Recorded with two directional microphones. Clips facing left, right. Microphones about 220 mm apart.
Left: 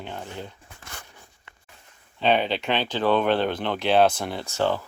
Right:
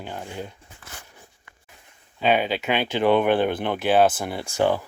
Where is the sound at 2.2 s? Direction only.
5° right (ahead or behind).